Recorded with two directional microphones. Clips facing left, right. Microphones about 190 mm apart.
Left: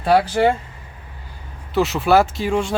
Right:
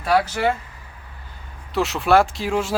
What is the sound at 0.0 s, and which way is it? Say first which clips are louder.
Speech: left 4 dB; 30° left (ahead or behind).